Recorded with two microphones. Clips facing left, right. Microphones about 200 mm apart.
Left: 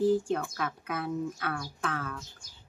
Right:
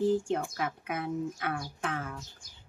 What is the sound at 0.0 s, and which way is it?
Speech, 20° right (ahead or behind).